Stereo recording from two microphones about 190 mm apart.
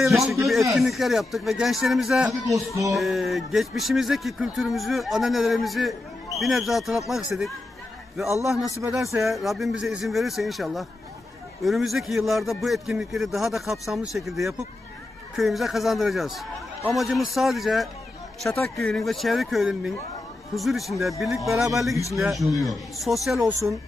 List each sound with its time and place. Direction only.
0.0 s speech: centre (ahead or behind)
2.5 s a sound: 15° right (ahead or behind)
2.9 s speech: centre (ahead or behind)
9.1 s speech: centre (ahead or behind)